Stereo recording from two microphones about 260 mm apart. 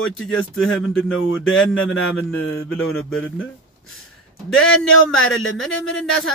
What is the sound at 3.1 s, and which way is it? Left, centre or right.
Speech, centre.